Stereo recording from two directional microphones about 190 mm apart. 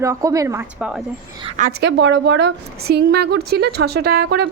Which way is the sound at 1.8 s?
65° right (ahead or behind).